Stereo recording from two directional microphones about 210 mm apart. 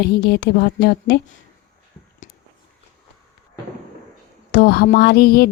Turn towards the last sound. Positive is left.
turn(degrees=50)  # may be behind; listen again after turning